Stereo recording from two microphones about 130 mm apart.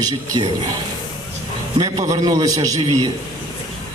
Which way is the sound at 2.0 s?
30° right (ahead or behind).